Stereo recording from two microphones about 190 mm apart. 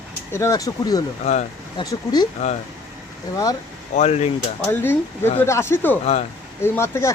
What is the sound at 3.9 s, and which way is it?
Speech, 35° left (ahead or behind).